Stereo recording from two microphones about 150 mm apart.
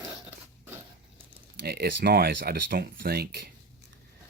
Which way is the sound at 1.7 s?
90° right.